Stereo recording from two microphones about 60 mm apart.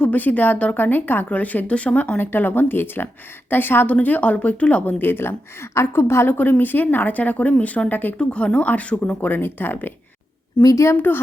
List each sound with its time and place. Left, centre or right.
0.0 s speech: left
2.1 s speech: left
3.9 s speech: left
6.3 s speech: left
8.2 s speech: centre; by 9.9 s left
10.6 s a woman's voice: left
10.9 s speech: left